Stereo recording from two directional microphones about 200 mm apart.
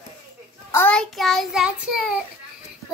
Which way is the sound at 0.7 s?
10° left (ahead or behind).